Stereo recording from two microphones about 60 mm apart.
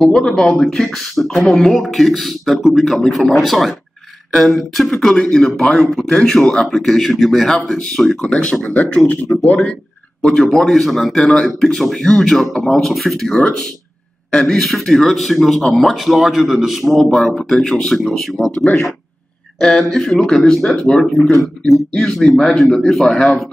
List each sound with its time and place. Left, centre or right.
0.0 s speech: centre
10.2 s speech: centre
19.6 s speech: centre